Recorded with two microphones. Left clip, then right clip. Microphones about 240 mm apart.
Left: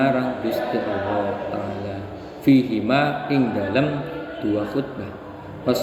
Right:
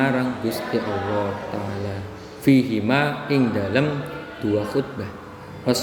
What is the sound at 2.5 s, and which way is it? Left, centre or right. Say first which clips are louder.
A man's voice: left 1 dB; right.